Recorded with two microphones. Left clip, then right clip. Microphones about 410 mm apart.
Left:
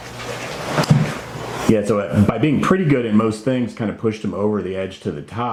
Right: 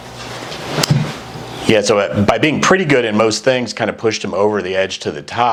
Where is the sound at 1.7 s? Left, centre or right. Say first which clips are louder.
Right 7 dB; right.